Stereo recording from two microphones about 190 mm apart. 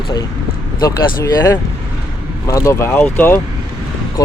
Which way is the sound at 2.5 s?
15° left (ahead or behind).